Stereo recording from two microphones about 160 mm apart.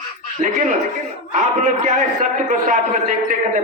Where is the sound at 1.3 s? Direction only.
50° right (ahead or behind).